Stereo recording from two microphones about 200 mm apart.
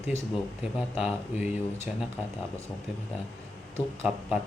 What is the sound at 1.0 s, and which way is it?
Speech, 5° right (ahead or behind).